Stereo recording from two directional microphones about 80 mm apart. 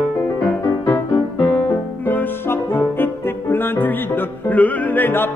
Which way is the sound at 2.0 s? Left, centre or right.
Left.